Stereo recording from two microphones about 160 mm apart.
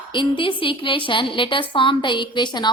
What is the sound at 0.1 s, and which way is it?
A woman's voice, 30° left (ahead or behind).